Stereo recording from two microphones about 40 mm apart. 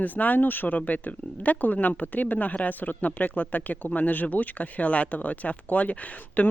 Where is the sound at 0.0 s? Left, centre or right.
Left.